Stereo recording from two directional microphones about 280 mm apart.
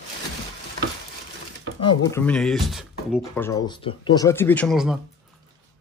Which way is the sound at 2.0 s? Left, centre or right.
Centre.